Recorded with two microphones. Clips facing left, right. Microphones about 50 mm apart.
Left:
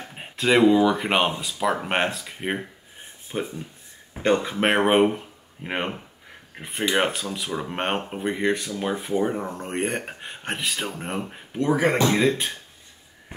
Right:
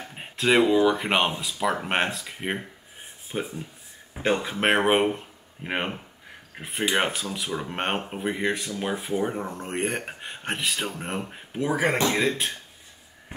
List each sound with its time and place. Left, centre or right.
0.0 s speech: centre